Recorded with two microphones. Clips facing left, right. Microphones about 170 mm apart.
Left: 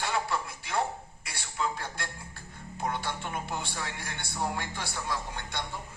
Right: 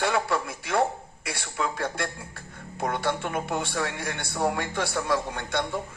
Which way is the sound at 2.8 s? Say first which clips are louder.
Right 6 dB; 70° right (ahead or behind).